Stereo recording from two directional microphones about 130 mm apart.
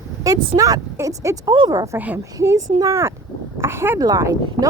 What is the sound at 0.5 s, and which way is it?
Speech, 25° right (ahead or behind).